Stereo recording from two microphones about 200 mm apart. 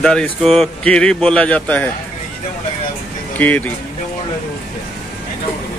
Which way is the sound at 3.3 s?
10° left (ahead or behind).